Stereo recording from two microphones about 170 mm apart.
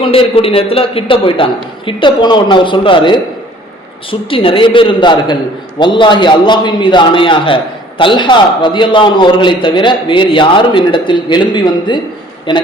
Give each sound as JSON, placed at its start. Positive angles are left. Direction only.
{"t": 0.0, "sound": "a man's voice", "side_deg": 35}